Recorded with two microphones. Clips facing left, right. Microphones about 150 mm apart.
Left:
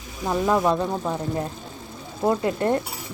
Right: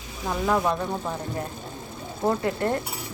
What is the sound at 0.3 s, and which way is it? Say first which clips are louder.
Speech: left 3 dB; 15° left (ahead or behind).